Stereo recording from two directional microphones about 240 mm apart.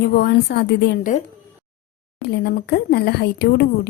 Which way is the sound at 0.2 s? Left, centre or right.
Left.